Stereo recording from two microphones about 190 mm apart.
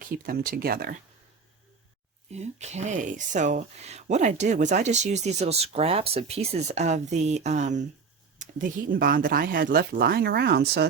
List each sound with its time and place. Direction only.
0.0 s speech: 50° right (ahead or behind)
2.3 s speech: 35° right (ahead or behind); by 10.8 s 60° right (ahead or behind)